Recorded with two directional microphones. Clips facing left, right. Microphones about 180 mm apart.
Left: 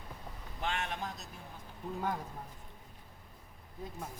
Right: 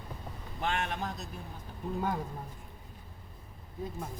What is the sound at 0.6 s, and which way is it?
Speech, 55° right (ahead or behind).